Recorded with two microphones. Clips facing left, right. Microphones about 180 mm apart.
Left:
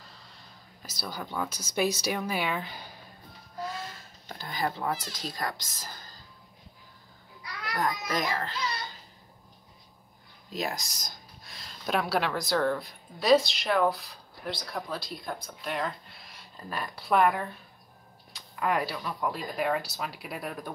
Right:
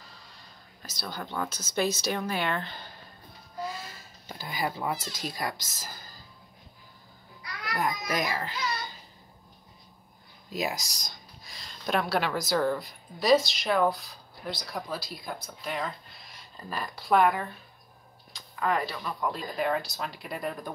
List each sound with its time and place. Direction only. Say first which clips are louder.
0.1 s speech: even; centre (ahead or behind)
3.6 s a sound: left 1 dB; 5° right (ahead or behind)
5.2 s speech: right 1 dB; 10° right (ahead or behind)
7.8 s speech: even; 10° right (ahead or behind)
10.5 s speech: right 1 dB; 5° right (ahead or behind)